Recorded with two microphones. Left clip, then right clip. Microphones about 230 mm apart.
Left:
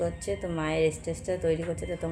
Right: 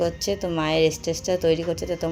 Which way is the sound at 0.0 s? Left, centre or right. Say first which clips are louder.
Right 6 dB; right.